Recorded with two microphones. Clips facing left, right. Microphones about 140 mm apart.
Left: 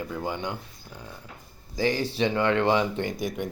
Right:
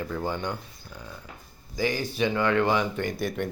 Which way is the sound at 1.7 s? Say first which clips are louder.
Left 2 dB; 30° left (ahead or behind).